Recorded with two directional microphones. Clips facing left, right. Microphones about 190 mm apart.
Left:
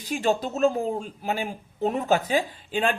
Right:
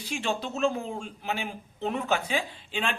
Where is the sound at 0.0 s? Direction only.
40° left (ahead or behind).